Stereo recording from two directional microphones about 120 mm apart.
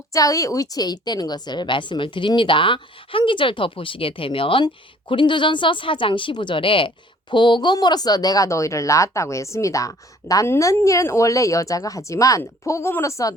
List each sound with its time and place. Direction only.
0.1 s a woman's voice: 30° left (ahead or behind)